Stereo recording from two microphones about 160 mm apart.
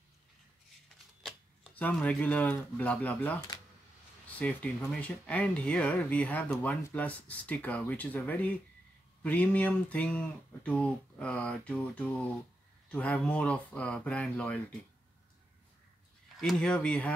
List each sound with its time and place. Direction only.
1.2 s speech: 5° left (ahead or behind)
4.4 s speech: 10° left (ahead or behind)
16.3 s speech: 5° left (ahead or behind)